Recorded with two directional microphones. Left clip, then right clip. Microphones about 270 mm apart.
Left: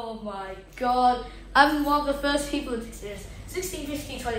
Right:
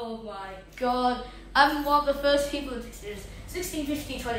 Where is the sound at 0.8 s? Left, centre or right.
Centre.